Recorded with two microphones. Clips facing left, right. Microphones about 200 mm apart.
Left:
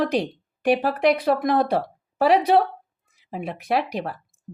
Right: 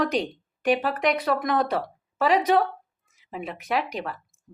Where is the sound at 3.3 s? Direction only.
35° left (ahead or behind).